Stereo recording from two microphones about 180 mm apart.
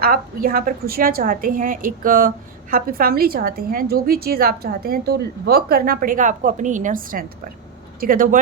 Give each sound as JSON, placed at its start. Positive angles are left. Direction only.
{"t": 0.0, "sound": "a woman's voice", "side_deg": -55}